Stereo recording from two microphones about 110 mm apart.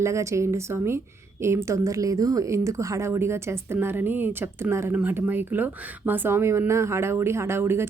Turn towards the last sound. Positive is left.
turn(degrees=-20)  # may be behind; listen again after turning